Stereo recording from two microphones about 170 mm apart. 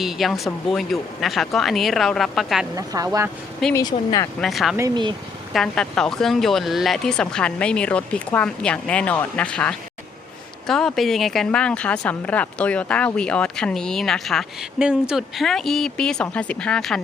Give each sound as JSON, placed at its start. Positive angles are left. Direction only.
{"t": 0.0, "sound": "speech", "side_deg": 0}
{"t": 2.7, "sound": "speech", "side_deg": -20}
{"t": 3.8, "sound": "speech", "side_deg": 20}
{"t": 4.4, "sound": "speech", "side_deg": 0}